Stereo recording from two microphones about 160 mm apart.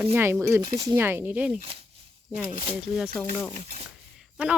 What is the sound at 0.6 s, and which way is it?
Speech, 25° right (ahead or behind).